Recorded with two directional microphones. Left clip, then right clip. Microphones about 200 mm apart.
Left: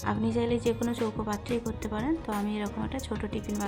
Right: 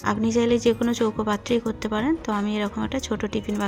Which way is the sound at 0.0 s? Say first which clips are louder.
Right 7 dB; 25° right (ahead or behind).